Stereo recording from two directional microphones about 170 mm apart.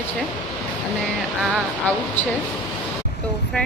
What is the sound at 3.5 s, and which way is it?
Speech, 5° left (ahead or behind).